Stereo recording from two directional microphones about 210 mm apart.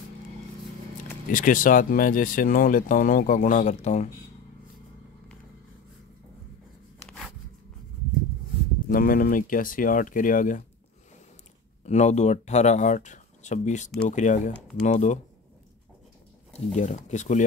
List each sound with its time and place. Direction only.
1.3 s speech: 40° left (ahead or behind)
7.1 s zipper: centre (ahead or behind)
8.8 s speech: 40° left (ahead or behind)
11.8 s speech: 35° left (ahead or behind)
16.5 s speech: 30° left (ahead or behind)